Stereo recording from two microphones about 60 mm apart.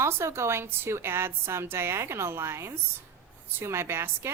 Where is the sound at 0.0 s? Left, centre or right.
Right.